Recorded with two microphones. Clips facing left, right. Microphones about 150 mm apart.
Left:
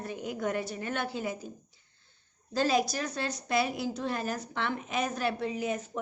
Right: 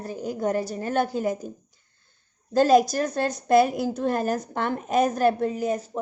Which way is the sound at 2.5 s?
45° right (ahead or behind).